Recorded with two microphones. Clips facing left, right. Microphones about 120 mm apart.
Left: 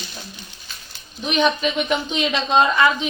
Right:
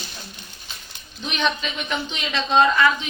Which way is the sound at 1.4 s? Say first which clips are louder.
Left 6 dB; 15° left (ahead or behind).